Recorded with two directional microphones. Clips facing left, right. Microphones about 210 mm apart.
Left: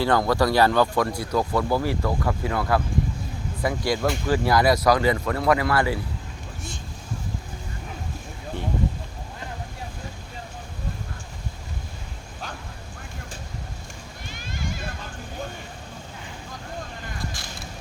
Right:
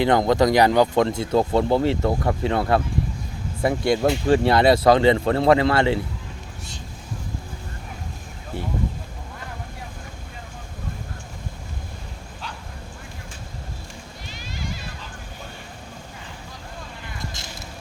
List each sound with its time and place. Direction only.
0.0 s speech: 20° right (ahead or behind)
14.3 s a sound: 50° left (ahead or behind)
17.4 s vehicle: 20° right (ahead or behind)